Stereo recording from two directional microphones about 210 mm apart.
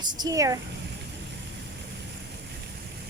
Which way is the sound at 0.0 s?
20° right (ahead or behind).